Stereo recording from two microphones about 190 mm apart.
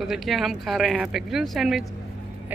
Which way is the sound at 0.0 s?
Centre (ahead or behind).